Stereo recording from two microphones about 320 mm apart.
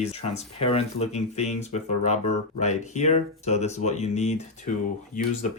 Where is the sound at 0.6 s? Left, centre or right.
Centre.